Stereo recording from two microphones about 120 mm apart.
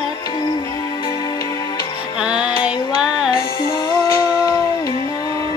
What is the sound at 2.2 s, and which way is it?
Music, 10° right (ahead or behind).